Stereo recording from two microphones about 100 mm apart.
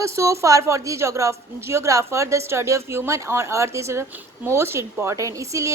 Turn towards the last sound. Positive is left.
turn(degrees=-30)  # may be behind; listen again after turning